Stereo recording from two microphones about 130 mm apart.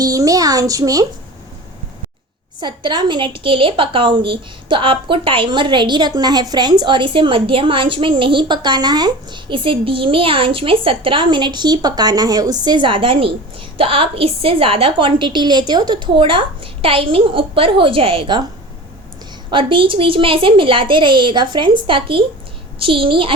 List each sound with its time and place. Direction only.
0.0 s a sound: 30° right (ahead or behind)
2.6 s a woman's voice: 35° right (ahead or behind)
19.5 s a woman's voice: 40° right (ahead or behind)